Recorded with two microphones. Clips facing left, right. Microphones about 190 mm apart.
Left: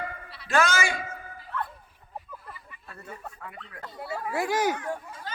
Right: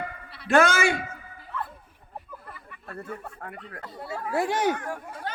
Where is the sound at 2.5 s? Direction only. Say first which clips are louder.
Right 4 dB; 55° right (ahead or behind).